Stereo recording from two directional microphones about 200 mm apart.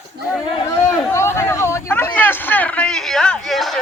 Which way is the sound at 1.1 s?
15° left (ahead or behind).